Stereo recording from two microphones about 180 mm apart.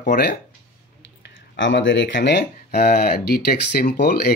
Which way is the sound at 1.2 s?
90° left.